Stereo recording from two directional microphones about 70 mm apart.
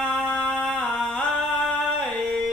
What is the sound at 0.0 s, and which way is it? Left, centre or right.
Music, centre.